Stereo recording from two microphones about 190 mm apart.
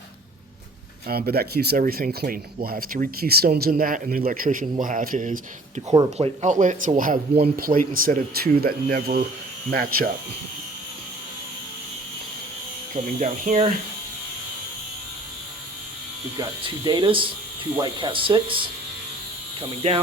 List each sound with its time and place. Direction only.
1.0 s speech: 55° right (ahead or behind)
5.9 s speech: 30° right (ahead or behind); by 10.1 s 50° right (ahead or behind)
13.1 s speech: 40° right (ahead or behind)
16.4 s speech: 20° right (ahead or behind)
19.8 s speech: 35° right (ahead or behind)